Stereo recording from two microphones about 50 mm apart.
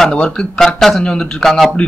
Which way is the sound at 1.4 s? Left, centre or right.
Centre.